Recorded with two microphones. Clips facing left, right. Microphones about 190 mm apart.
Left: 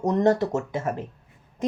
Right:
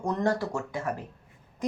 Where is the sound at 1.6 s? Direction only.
25° left (ahead or behind).